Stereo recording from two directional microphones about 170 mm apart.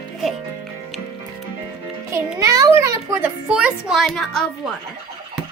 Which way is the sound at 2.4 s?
20° right (ahead or behind).